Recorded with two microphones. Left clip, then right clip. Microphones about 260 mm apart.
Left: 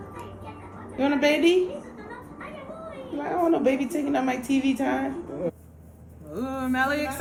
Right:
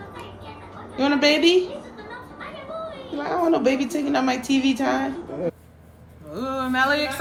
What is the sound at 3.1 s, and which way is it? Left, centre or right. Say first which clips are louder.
A woman's voice: right 2 dB; centre.